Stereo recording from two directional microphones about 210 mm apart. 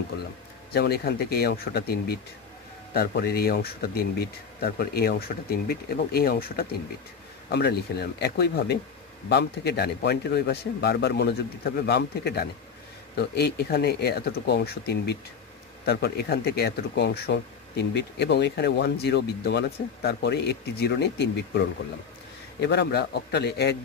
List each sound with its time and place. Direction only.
0.7 s speech: 50° left (ahead or behind)